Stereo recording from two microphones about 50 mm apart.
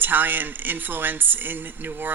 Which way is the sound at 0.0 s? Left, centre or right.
Right.